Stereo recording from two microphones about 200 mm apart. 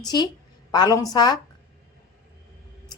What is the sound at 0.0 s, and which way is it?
A woman's voice, 20° left (ahead or behind).